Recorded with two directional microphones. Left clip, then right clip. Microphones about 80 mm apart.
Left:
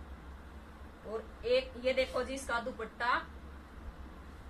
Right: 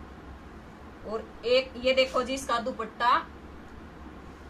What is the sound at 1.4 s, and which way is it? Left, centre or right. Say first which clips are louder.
A woman's voice: right 6 dB; centre.